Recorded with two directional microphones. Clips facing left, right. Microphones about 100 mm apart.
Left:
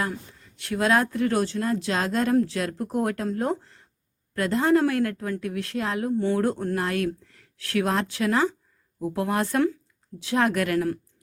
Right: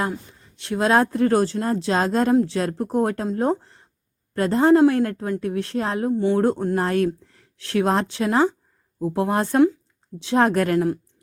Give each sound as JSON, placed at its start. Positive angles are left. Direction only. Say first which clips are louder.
{"t": 0.1, "sound": "a woman's voice", "louder": "right 4 dB", "side_deg": -25}
{"t": 6.1, "sound": "speech", "louder": "right 4 dB", "side_deg": -20}
{"t": 6.4, "sound": "a woman's voice", "louder": "right 4 dB", "side_deg": -30}